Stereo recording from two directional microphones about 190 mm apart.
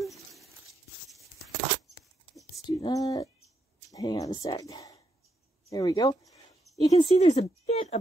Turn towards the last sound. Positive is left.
turn(degrees=35)  # may be behind; listen again after turning